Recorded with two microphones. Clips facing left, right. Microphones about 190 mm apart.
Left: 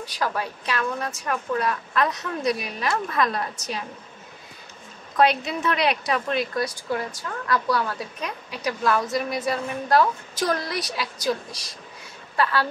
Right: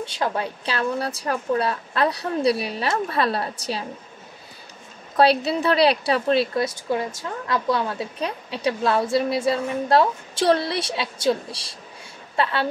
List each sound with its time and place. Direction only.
0.0 s a woman's voice: 25° right (ahead or behind)
5.1 s a woman's voice: 35° right (ahead or behind)